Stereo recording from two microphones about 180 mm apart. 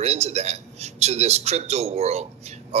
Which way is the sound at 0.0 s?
35° right (ahead or behind).